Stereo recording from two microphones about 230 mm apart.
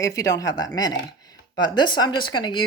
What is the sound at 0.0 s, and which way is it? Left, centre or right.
Speech, centre.